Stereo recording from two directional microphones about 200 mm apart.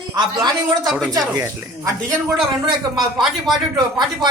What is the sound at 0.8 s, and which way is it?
Speech, centre (ahead or behind).